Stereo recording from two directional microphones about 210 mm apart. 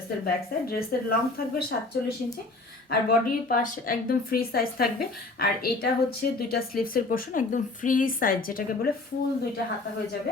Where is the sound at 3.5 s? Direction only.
40° left (ahead or behind).